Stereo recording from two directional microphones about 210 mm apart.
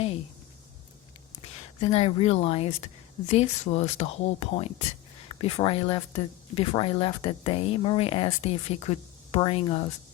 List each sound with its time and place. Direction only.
1.8 s speech: 30° left (ahead or behind)